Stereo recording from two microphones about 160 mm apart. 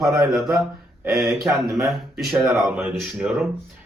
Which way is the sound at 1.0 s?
15° right (ahead or behind).